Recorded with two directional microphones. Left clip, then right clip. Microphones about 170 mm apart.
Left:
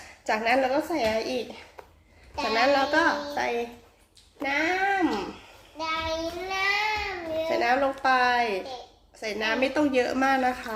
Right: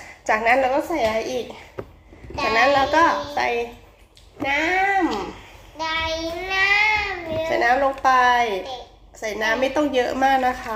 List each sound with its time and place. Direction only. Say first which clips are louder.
0.3 s a woman's voice: right 6 dB; 30° left (ahead or behind)
5.7 s child singing: right 5 dB; 30° left (ahead or behind)
7.4 s a woman's voice: right 6 dB; 20° left (ahead or behind)